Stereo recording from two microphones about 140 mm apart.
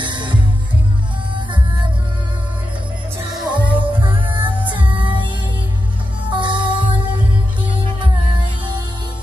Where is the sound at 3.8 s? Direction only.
35° right (ahead or behind).